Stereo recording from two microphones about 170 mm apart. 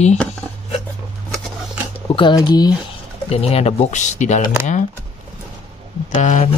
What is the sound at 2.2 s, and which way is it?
Speech, 25° left (ahead or behind).